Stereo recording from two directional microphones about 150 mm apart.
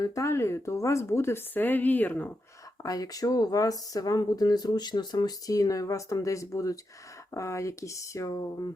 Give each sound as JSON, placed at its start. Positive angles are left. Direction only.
{"t": 0.0, "sound": "speech", "side_deg": 20}
{"t": 2.8, "sound": "speech", "side_deg": 25}